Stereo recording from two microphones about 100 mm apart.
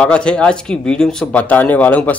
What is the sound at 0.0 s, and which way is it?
Speech, 10° left (ahead or behind).